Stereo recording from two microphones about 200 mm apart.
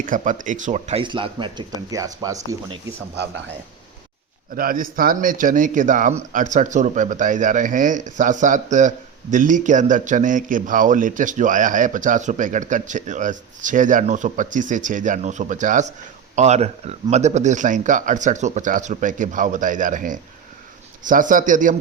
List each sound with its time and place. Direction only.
0.0 s speech: 40° right (ahead or behind); by 2.6 s 15° right (ahead or behind)
4.5 s speech: 45° right (ahead or behind)